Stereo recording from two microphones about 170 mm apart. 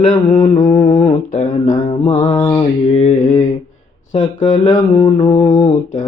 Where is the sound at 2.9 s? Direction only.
40° left (ahead or behind).